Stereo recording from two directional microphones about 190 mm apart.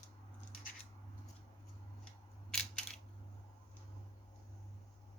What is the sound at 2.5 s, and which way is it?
Crushing, 5° left (ahead or behind).